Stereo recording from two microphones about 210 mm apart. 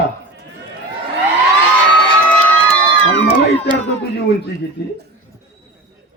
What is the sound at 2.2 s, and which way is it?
Crowd, 5° left (ahead or behind).